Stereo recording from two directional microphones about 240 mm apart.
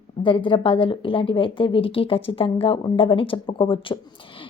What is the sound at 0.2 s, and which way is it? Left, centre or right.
A woman's voice, left.